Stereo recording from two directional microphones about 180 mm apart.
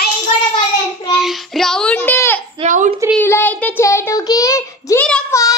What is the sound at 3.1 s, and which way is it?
A child's voice, 10° left (ahead or behind).